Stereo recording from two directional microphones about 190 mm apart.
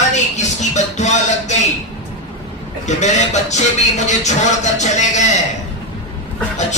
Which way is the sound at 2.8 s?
40° left (ahead or behind).